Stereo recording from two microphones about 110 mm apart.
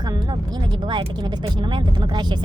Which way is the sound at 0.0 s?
40° right (ahead or behind).